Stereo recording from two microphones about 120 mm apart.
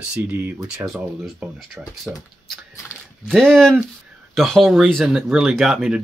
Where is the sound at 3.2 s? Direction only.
5° left (ahead or behind).